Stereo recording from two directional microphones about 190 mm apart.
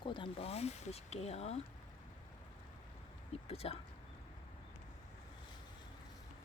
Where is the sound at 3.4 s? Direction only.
30° left (ahead or behind).